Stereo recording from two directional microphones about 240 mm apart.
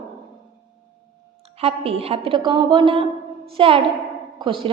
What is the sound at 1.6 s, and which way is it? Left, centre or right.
A woman's voice, right.